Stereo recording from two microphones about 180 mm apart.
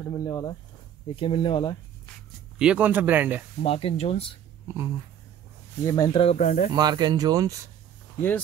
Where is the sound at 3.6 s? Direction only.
35° left (ahead or behind).